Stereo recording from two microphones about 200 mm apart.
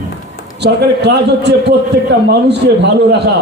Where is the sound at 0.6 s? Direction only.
60° right (ahead or behind).